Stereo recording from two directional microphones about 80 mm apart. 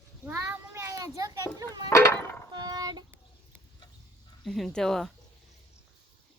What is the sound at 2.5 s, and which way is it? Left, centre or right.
Child singing, right.